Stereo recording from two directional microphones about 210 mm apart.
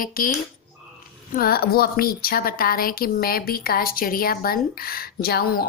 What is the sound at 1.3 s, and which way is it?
A woman's voice, 45° left (ahead or behind).